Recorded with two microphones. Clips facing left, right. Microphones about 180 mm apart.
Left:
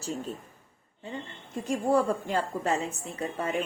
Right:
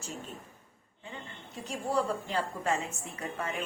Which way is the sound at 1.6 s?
50° left (ahead or behind).